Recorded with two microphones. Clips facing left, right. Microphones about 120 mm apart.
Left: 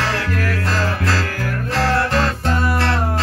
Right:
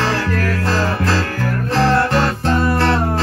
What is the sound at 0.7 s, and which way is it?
Music, 30° right (ahead or behind).